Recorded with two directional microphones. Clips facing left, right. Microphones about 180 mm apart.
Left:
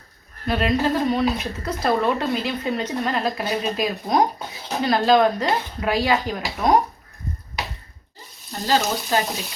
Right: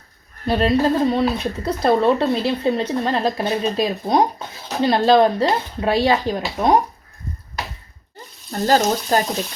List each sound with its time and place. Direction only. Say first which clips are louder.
0.4 s speech: right 4 dB; 35° right (ahead or behind)
8.6 s speech: right 4 dB; 45° right (ahead or behind)